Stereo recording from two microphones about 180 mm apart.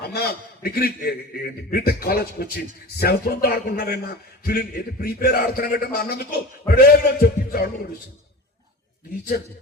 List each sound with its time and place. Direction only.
0.0 s a man's voice: 60° left (ahead or behind)